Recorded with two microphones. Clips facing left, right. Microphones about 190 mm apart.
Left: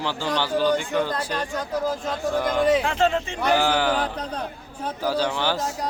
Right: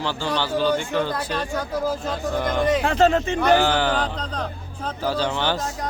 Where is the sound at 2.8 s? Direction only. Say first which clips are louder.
Right 4 dB; 40° right (ahead or behind).